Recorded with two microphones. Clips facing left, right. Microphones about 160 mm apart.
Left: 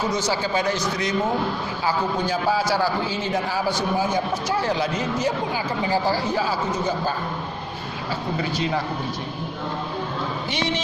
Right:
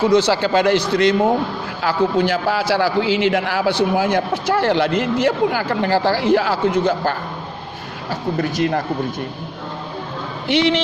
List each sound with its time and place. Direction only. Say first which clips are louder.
0.0 s speech: right 9 dB; 65° right (ahead or behind)
1.8 s a man's voice: right 7 dB; 80° right
8.4 s speech: right 6 dB; 55° right (ahead or behind)
10.5 s speech: right 11 dB; 70° right (ahead or behind)